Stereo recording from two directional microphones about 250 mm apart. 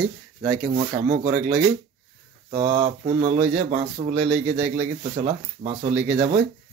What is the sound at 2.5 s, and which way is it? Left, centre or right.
Speech, right.